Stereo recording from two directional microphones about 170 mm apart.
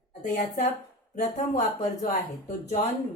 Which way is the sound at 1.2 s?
45° left (ahead or behind).